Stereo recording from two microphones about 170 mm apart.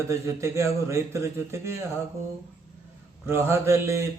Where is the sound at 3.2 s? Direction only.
15° right (ahead or behind).